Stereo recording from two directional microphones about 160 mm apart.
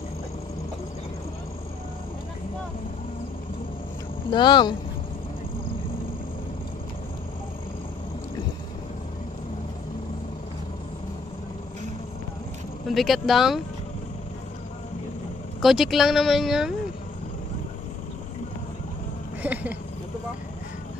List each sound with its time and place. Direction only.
4.3 s speech: 30° left (ahead or behind)
12.8 s speech: centre (ahead or behind)
15.6 s speech: centre (ahead or behind)
19.4 s a sound: 10° right (ahead or behind)